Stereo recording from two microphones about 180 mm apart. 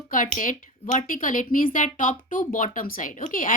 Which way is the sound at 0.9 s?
50° left (ahead or behind).